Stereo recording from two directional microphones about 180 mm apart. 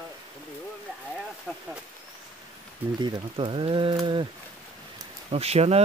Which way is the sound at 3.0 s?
25° right (ahead or behind).